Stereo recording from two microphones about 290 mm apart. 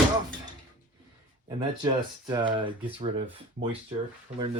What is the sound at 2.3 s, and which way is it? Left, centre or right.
Speech, centre.